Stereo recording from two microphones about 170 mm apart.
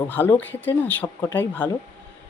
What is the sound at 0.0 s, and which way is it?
A man's voice, 10° left (ahead or behind).